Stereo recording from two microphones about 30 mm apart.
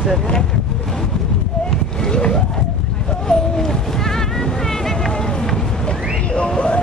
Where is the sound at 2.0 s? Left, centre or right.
Left.